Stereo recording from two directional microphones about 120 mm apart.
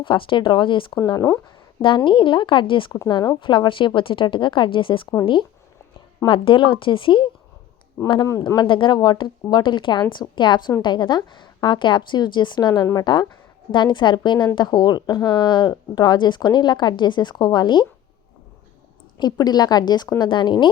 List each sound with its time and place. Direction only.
0.0 s a woman's voice: 45° left (ahead or behind)
0.9 s speech: 30° left (ahead or behind)
2.0 s a woman's voice: 45° left (ahead or behind)
8.3 s speech: 25° left (ahead or behind)
8.5 s speech: 45° left (ahead or behind)
19.2 s speech: 35° left (ahead or behind)